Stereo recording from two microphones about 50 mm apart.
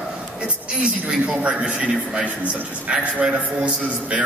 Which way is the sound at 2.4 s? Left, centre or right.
Right.